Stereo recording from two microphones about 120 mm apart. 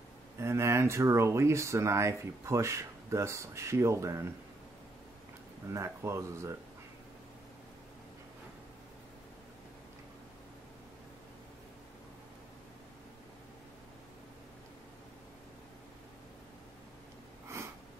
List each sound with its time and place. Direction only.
0.4 s speech: 20° right (ahead or behind)
5.7 s speech: 25° right (ahead or behind)